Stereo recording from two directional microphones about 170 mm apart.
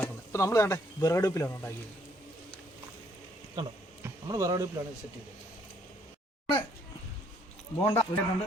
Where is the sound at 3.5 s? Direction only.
20° right (ahead or behind).